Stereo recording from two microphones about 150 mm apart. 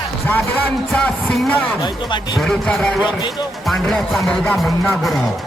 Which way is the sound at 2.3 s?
5° left (ahead or behind).